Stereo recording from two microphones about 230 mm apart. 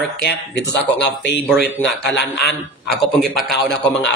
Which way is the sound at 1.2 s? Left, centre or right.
Left.